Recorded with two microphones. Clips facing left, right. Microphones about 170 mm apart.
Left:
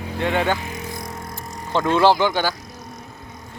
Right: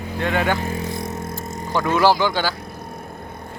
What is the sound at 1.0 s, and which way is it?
Vehicle, 25° right (ahead or behind).